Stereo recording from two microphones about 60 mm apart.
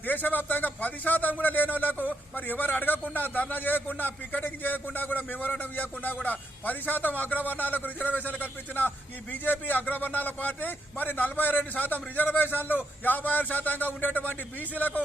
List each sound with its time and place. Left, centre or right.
0.0 s a man's voice: left